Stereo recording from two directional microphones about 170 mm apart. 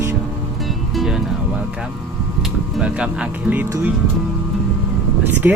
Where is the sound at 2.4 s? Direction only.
5° right (ahead or behind).